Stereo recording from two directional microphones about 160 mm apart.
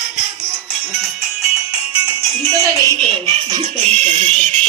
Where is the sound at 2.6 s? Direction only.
20° right (ahead or behind).